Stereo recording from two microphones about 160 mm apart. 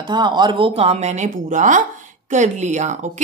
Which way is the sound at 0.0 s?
30° right (ahead or behind).